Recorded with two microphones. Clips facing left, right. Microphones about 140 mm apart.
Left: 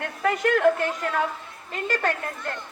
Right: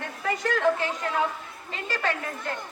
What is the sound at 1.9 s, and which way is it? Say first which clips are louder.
Speech: left 2 dB; 50° left (ahead or behind).